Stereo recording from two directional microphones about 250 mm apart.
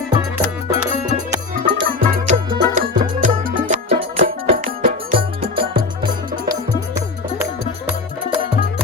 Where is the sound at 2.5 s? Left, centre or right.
Right.